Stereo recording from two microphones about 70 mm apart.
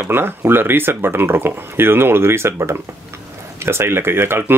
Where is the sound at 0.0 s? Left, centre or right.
Right.